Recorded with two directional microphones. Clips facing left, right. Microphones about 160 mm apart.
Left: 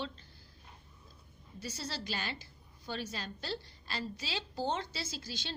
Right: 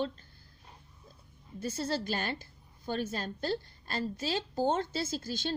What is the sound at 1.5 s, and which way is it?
A woman's voice, 50° right (ahead or behind).